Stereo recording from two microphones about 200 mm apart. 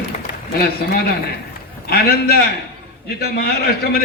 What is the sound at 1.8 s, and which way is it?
A man's voice, 50° left (ahead or behind).